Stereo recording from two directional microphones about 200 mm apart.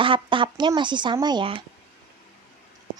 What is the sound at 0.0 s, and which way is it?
A woman's voice, 25° right (ahead or behind).